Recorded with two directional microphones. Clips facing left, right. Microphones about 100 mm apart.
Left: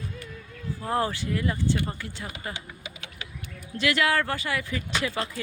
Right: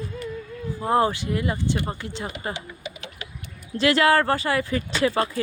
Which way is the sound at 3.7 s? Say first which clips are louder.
Right 6 dB; 35° right (ahead or behind).